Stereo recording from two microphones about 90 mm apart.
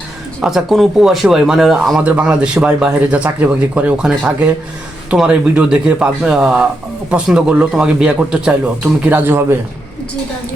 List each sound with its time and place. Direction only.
0.4 s speech: 5° right (ahead or behind)
2.0 s speech: 15° right (ahead or behind)